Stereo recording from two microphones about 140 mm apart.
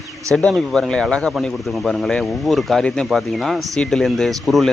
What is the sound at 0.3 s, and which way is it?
Speech, 5° left (ahead or behind).